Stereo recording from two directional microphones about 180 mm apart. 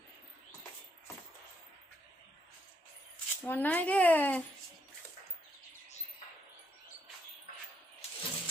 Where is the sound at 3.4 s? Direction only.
10° left (ahead or behind).